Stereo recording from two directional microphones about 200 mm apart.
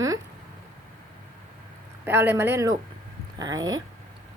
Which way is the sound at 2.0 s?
10° right (ahead or behind).